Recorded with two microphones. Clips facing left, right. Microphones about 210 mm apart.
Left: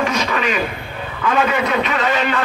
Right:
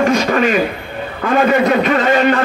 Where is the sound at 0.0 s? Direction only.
45° right (ahead or behind).